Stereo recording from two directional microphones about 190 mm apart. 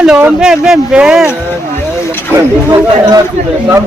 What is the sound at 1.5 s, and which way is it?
Vehicle, 10° left (ahead or behind).